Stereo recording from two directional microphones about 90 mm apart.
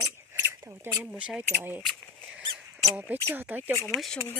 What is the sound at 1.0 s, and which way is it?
Speech, 10° right (ahead or behind).